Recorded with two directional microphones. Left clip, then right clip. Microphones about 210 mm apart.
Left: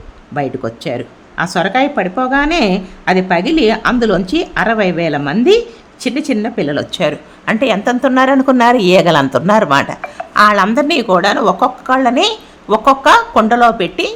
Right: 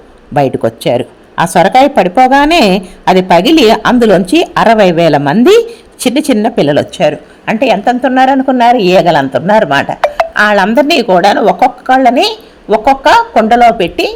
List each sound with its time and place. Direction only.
0.3 s a woman's voice: 20° right (ahead or behind)
6.9 s a woman's voice: 5° right (ahead or behind)
10.3 s a woman's voice: 5° right (ahead or behind)